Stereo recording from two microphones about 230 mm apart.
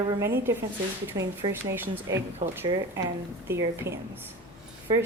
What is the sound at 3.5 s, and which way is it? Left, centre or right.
Speech, centre.